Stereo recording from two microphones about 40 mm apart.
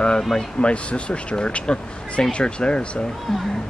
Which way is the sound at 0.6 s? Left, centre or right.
Left.